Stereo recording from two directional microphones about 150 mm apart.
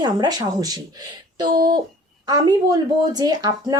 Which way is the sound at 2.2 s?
25° right (ahead or behind).